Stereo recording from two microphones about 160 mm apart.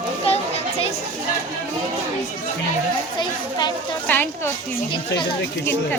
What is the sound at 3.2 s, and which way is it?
Speech, 25° left (ahead or behind).